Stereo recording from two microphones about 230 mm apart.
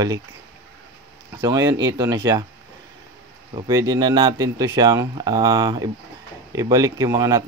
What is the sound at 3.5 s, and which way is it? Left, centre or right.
A man's voice, centre.